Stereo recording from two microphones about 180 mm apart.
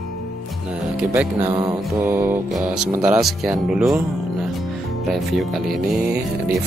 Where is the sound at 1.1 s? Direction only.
10° right (ahead or behind).